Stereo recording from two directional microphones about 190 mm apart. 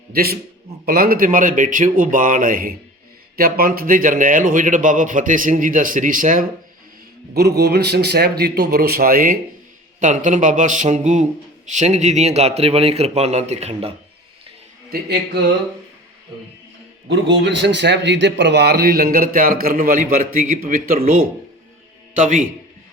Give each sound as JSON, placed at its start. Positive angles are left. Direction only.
{"t": 0.1, "sound": "a man's voice", "side_deg": -50}
{"t": 7.3, "sound": "a man's voice", "side_deg": -60}
{"t": 17.1, "sound": "a man's voice", "side_deg": -70}